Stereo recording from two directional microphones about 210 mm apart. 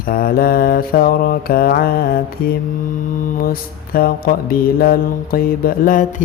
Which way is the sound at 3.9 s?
45° left (ahead or behind).